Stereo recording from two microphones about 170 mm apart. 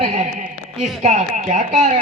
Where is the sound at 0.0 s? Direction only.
45° right (ahead or behind).